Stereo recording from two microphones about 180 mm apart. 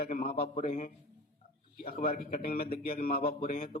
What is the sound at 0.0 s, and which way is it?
A man's voice, 50° left (ahead or behind).